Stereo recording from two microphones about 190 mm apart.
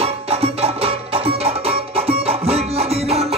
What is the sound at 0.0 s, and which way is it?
Music, 30° right (ahead or behind).